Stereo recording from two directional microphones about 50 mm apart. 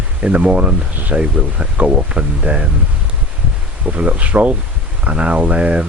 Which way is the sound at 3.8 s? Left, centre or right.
Right.